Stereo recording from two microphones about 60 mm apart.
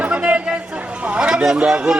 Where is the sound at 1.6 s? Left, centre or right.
Centre.